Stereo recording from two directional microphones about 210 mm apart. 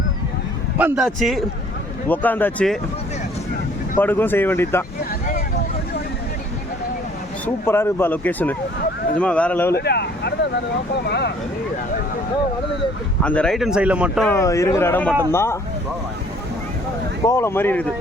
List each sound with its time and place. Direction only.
0.8 s speech: 5° right (ahead or behind)
3.9 s speech: 10° left (ahead or behind)
7.4 s speech: 10° left (ahead or behind)
9.7 s speech: 50° left (ahead or behind)
13.2 s speech: 5° left (ahead or behind)
14.3 s speech: 15° left (ahead or behind)
17.2 s speech: 10° left (ahead or behind)